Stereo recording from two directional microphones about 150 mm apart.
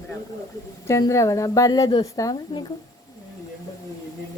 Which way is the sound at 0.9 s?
20° left (ahead or behind).